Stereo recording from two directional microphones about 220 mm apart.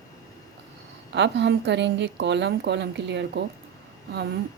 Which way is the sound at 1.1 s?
50° right (ahead or behind).